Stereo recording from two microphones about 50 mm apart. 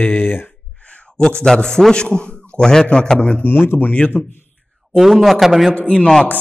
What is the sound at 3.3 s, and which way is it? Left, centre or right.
Speech, left.